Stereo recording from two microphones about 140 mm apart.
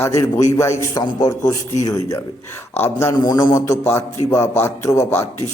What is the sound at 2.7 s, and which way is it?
Speech, 15° left (ahead or behind).